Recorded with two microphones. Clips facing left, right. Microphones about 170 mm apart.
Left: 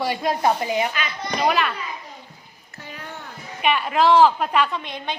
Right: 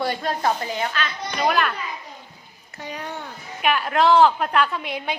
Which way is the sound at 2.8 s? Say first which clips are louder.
Right 6 dB; 20° right (ahead or behind).